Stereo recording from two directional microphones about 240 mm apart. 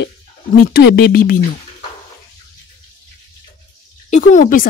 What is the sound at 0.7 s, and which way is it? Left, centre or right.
Speech, left.